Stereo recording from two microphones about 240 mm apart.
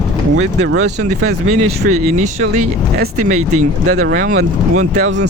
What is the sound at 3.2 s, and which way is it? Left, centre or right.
Speech, right.